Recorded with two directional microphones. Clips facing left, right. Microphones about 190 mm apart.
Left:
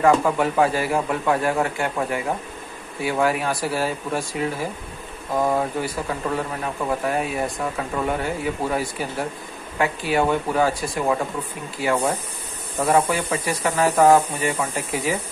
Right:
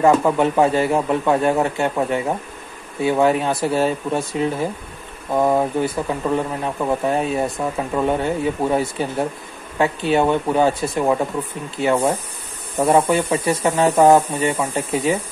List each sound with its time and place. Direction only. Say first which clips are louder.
0.0 s speech: right 3 dB; 25° right (ahead or behind)